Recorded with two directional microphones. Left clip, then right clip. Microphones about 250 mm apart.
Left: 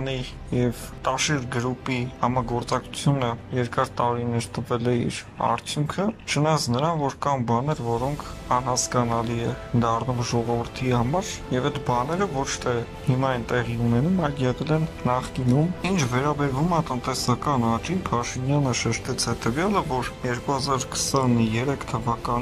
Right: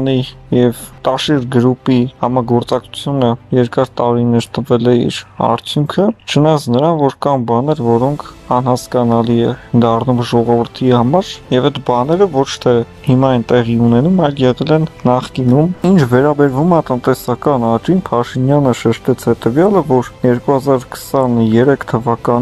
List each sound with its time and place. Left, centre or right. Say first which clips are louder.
0.0 s speech: right 14 dB; centre